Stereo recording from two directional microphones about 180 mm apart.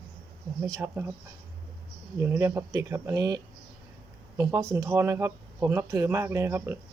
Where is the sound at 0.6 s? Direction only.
15° right (ahead or behind).